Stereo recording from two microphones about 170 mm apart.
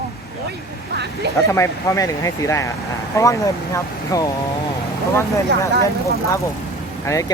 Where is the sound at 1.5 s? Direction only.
15° left (ahead or behind).